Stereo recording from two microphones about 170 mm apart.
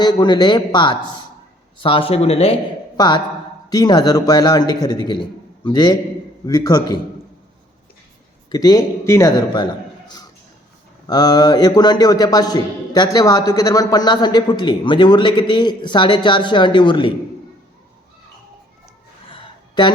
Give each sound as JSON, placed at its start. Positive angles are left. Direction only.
{"t": 0.0, "sound": "a man's voice", "side_deg": 25}
{"t": 3.0, "sound": "a man's voice", "side_deg": 25}
{"t": 8.4, "sound": "a man's voice", "side_deg": 25}
{"t": 11.0, "sound": "a man's voice", "side_deg": 25}
{"t": 19.3, "sound": "a sound", "side_deg": 25}